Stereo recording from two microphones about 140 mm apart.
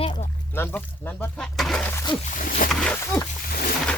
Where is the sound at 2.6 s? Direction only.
85° left.